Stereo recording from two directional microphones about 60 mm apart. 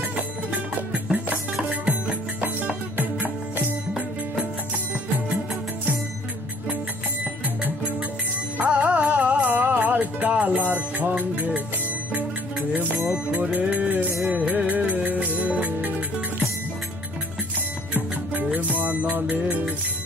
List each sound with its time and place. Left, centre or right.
1.7 s music: centre
3.0 s music: right
8.5 s music: right
13.1 s music: right
17.9 s music: right